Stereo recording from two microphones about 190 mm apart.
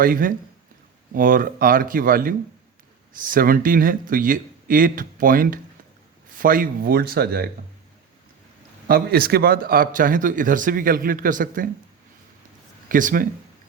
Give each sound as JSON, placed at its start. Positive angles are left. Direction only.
{"t": 0.0, "sound": "speech", "side_deg": -45}
{"t": 8.9, "sound": "speech", "side_deg": -50}
{"t": 12.9, "sound": "speech", "side_deg": -45}